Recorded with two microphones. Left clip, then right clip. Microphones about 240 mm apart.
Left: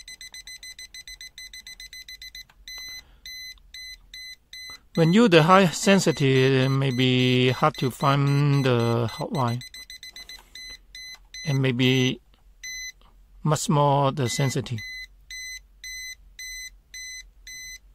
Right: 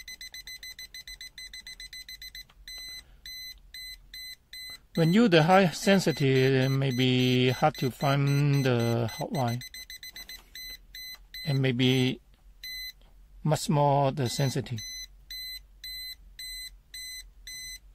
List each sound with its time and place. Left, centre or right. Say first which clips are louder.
0.2 s alarm: left 2 dB; centre
4.9 s speech: left 5 dB; left
9.7 s alarm clock: left 2 dB; centre
11.4 s speech: left 4 dB; left